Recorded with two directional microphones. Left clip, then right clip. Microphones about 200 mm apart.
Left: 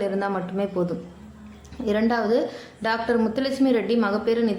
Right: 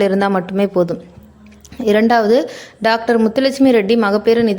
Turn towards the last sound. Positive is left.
turn(degrees=-40)  # may be behind; listen again after turning